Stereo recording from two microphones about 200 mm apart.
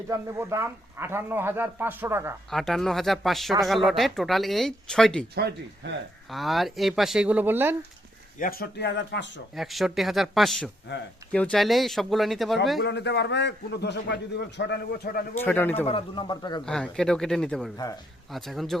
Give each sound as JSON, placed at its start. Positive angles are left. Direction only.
{"t": 0.1, "sound": "a man's voice", "side_deg": -15}
{"t": 2.5, "sound": "speech", "side_deg": 0}
{"t": 5.3, "sound": "speech", "side_deg": -55}
{"t": 6.3, "sound": "speech", "side_deg": 0}
{"t": 8.4, "sound": "a man's voice", "side_deg": 50}
{"t": 9.6, "sound": "speech", "side_deg": 0}
{"t": 10.9, "sound": "a man's voice", "side_deg": 60}
{"t": 11.3, "sound": "speech", "side_deg": 5}
{"t": 12.8, "sound": "a man's voice", "side_deg": 60}
{"t": 15.4, "sound": "a man's voice", "side_deg": 10}
{"t": 15.9, "sound": "a man's voice", "side_deg": 25}
{"t": 16.6, "sound": "speech", "side_deg": 5}